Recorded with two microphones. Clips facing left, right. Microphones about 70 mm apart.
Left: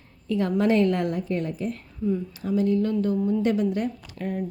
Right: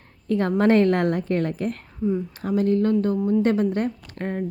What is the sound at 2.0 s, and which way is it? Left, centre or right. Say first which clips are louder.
Speech: right 2 dB; right.